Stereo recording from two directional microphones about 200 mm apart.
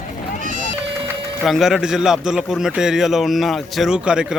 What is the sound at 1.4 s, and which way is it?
A man's voice, centre (ahead or behind).